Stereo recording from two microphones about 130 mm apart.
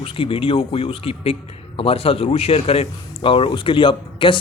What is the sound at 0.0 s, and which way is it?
Speech, 45° left (ahead or behind).